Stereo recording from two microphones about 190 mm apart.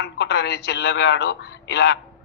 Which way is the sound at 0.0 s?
65° left (ahead or behind).